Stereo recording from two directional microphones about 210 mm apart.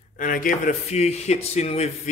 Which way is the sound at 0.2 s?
40° left (ahead or behind).